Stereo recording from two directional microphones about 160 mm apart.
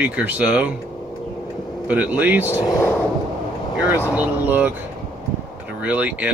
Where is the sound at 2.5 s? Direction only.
15° left (ahead or behind).